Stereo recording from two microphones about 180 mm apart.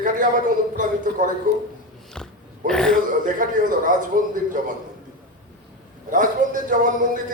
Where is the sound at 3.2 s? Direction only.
50° right (ahead or behind).